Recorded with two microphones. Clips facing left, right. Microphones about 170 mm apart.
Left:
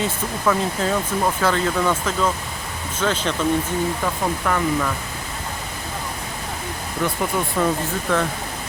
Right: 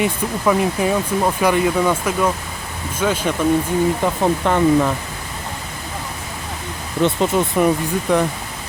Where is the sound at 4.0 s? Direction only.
30° right (ahead or behind).